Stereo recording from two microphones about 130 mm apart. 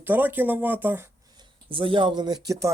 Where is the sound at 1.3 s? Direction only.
40° right (ahead or behind); by 2.7 s 25° right (ahead or behind).